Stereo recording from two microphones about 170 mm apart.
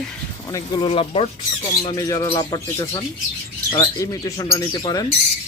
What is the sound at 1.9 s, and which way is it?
Speech, 20° left (ahead or behind).